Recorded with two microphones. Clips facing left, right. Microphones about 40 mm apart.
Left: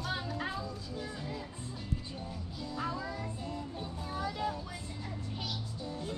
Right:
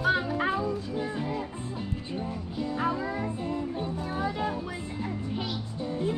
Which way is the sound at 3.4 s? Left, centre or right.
Right.